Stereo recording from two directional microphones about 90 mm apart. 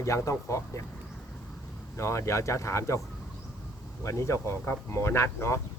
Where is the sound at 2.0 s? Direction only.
30° left (ahead or behind).